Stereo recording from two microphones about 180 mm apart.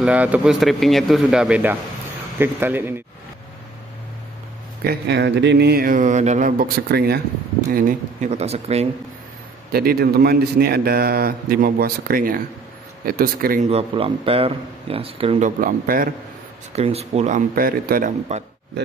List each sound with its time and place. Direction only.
0.0 s a man's voice: 10° right (ahead or behind)
4.8 s a man's voice: 65° right (ahead or behind)
7.7 s speech: 45° right (ahead or behind)
9.7 s a man's voice: 60° right (ahead or behind)
13.7 s speech: 35° right (ahead or behind); by 16.1 s 50° right (ahead or behind)
16.7 s speech: 35° right (ahead or behind); by 18.1 s 55° right (ahead or behind)